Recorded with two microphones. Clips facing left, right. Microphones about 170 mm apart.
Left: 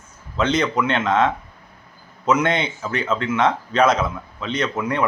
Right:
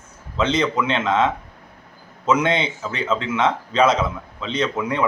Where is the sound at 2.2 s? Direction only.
30° right (ahead or behind).